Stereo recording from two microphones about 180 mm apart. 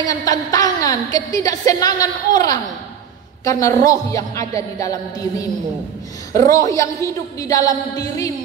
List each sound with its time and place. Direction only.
0.0 s a woman's voice: 20° left (ahead or behind)
6.3 s a woman's voice: 20° left (ahead or behind)